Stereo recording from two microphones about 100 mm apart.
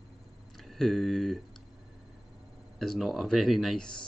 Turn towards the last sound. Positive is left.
turn(degrees=0)  # may be behind; listen again after turning